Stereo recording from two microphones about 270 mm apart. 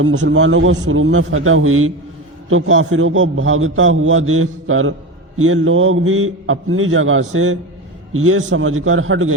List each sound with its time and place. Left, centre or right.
0.0 s a man's voice: right